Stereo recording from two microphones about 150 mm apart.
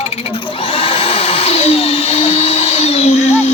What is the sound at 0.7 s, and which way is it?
Vacuum cleaner, 40° left (ahead or behind).